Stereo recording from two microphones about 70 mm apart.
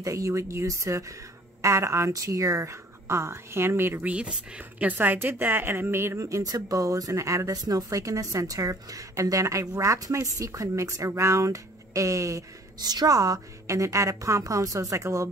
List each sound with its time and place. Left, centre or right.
0.0 s speech: right
4.0 s speech: centre; by 6.2 s right
6.2 s speech: right
12.8 s speech: right